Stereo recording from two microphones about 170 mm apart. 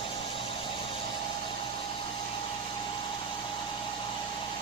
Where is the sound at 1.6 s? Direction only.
30° left (ahead or behind).